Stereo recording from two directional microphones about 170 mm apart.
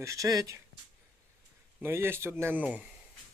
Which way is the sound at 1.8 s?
15° right (ahead or behind).